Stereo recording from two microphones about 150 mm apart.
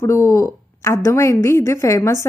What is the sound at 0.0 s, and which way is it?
A woman's voice, 20° left (ahead or behind).